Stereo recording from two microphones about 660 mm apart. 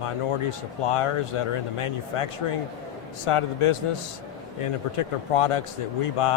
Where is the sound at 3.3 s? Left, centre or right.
Left.